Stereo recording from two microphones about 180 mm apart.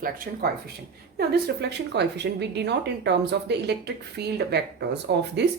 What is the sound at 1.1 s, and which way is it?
A woman's voice, 65° right (ahead or behind).